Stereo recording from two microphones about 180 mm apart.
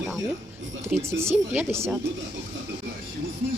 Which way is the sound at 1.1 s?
15° right (ahead or behind).